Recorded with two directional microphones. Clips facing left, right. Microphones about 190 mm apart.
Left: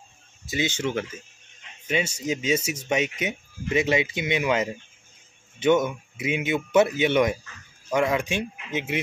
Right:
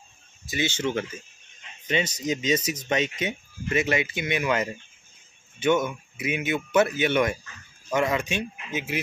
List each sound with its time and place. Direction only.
0.5 s speech: 15° left (ahead or behind)